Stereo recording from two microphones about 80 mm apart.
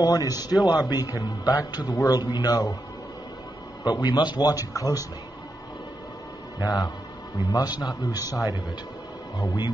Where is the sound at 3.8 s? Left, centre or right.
Left.